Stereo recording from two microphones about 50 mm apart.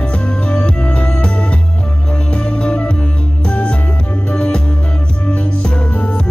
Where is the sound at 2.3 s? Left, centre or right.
Left.